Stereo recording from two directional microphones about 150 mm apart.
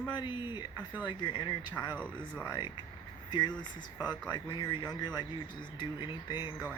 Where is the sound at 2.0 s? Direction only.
15° left (ahead or behind).